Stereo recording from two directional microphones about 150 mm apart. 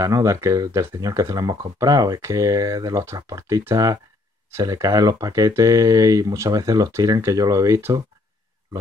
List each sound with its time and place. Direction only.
0.0 s speech: 20° right (ahead or behind)